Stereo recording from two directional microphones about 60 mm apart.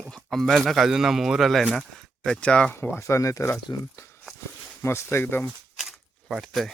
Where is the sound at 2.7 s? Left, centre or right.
Left.